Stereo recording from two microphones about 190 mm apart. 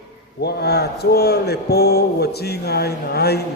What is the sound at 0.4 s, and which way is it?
A man's voice, 60° left (ahead or behind).